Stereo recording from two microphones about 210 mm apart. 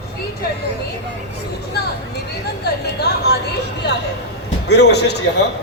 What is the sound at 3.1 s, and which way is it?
Speech, 50° left (ahead or behind).